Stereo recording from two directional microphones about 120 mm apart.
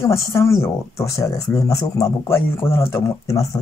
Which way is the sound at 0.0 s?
25° left (ahead or behind).